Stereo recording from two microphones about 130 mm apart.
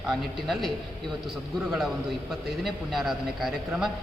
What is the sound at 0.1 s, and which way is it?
Speech, centre (ahead or behind).